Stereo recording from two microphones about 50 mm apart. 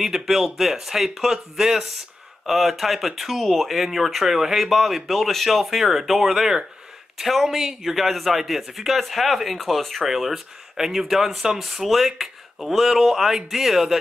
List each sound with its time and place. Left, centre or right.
0.0 s a man's voice: centre